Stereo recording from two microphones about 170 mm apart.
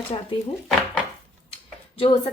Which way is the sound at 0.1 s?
35° left (ahead or behind).